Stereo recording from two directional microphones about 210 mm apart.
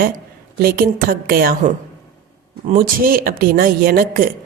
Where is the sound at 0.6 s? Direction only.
45° right (ahead or behind).